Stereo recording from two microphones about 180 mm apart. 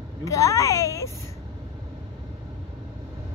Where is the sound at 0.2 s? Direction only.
15° left (ahead or behind).